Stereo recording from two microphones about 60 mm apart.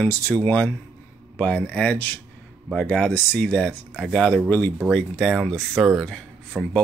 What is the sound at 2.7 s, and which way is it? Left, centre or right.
Speech, centre.